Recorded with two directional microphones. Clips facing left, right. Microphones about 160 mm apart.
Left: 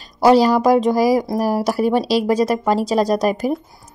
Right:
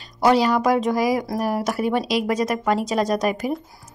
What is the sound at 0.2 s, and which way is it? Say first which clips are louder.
Speech: left 5 dB; 35° left (ahead or behind).